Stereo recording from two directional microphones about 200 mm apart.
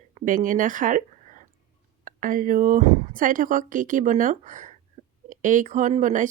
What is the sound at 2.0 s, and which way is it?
Speech, 45° right (ahead or behind).